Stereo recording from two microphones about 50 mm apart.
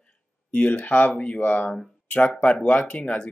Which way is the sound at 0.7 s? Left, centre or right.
Left.